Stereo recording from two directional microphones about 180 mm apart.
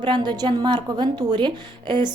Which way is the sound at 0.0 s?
25° right (ahead or behind).